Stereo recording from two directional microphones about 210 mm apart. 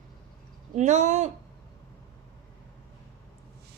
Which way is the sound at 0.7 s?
35° right (ahead or behind).